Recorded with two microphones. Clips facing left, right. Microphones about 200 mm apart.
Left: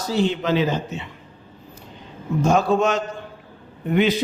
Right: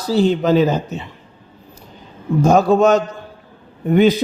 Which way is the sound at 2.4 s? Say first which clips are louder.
Right 6 dB; 40° right (ahead or behind).